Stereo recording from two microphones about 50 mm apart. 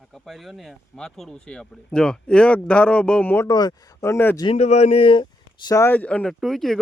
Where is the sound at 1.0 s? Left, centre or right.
Centre.